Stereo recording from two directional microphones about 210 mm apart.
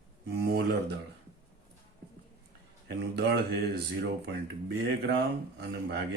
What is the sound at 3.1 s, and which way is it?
Speech, 50° right (ahead or behind).